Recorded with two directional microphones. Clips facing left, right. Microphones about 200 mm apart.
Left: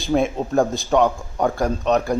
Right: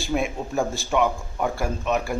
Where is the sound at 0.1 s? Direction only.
60° left (ahead or behind).